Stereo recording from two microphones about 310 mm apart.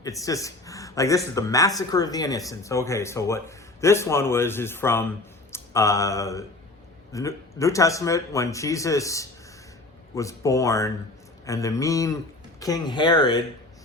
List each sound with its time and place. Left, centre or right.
0.0 s a man's voice: centre
5.5 s a sound: centre
7.1 s a man's voice: centre